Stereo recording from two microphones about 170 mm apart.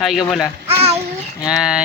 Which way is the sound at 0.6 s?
35° right (ahead or behind).